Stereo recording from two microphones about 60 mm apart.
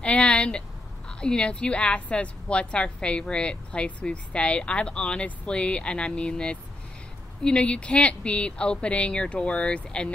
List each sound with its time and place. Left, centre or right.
0.0 s a woman's voice: centre